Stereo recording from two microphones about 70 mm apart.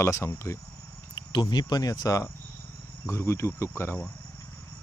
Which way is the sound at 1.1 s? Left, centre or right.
Left.